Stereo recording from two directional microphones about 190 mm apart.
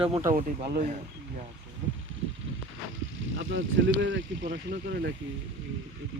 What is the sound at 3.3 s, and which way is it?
Speech, 90° right.